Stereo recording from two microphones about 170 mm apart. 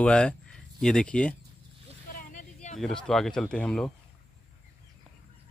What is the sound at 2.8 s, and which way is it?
Speech, centre (ahead or behind).